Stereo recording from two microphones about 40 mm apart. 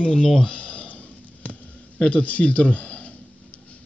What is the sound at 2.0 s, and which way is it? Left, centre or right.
Speech, left.